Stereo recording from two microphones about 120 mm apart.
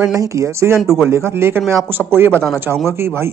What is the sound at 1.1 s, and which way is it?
Speech, 20° right (ahead or behind).